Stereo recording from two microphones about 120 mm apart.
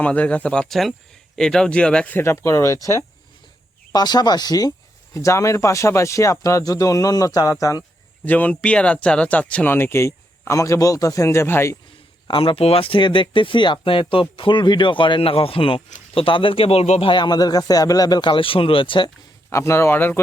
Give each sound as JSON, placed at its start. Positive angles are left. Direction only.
{"t": 0.0, "sound": "speech", "side_deg": 10}
{"t": 2.1, "sound": "speech", "side_deg": 20}
{"t": 8.2, "sound": "speech", "side_deg": 15}
{"t": 12.3, "sound": "speech", "side_deg": 50}
{"t": 17.1, "sound": "speech", "side_deg": 40}
{"t": 19.5, "sound": "speech", "side_deg": 25}